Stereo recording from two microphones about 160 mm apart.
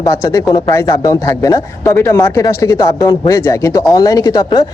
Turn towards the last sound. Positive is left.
turn(degrees=25)  # may be behind; listen again after turning